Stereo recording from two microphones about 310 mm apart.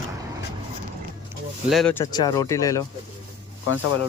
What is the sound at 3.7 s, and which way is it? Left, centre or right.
Speech, left.